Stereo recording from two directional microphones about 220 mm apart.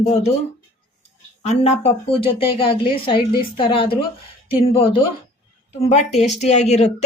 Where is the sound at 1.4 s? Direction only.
30° left (ahead or behind).